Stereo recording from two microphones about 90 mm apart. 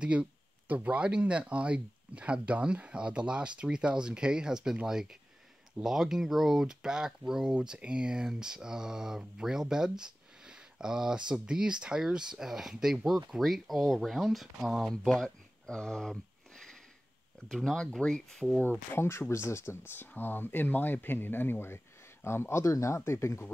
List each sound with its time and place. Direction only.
0.0 s speech: 15° right (ahead or behind)
15.0 s a sound: 5° left (ahead or behind)
17.5 s speech: 5° left (ahead or behind)
18.6 s speech: 25° left (ahead or behind)